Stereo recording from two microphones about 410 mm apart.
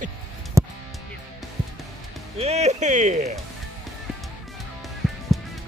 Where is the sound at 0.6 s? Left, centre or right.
Centre.